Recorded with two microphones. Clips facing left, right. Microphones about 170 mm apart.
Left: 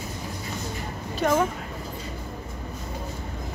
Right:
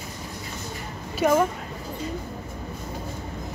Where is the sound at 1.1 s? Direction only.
5° right (ahead or behind).